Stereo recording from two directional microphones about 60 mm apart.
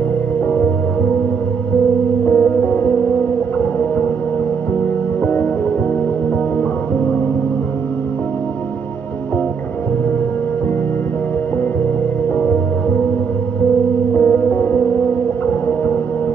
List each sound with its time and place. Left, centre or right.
2.2 s music: left
5.2 s music: left
14.1 s music: left
15.4 s whale vocalization: left